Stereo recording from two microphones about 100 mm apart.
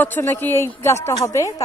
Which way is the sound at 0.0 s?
20° left (ahead or behind).